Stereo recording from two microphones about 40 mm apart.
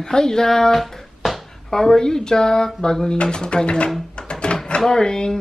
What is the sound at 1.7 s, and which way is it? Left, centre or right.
Speech, centre.